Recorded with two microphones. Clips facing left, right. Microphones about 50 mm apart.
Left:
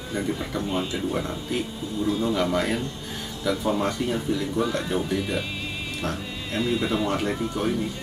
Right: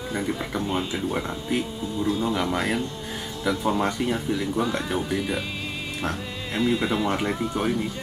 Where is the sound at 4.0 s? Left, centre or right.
Right.